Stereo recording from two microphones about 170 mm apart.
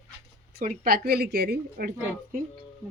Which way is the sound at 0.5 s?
50° right (ahead or behind).